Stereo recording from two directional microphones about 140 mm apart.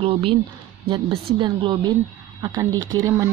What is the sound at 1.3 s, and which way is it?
A woman's voice, 35° right (ahead or behind).